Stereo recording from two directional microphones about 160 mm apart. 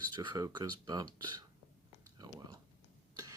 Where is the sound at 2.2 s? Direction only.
25° right (ahead or behind).